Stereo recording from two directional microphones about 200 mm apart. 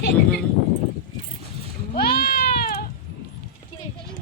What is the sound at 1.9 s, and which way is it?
Goat, 50° left (ahead or behind).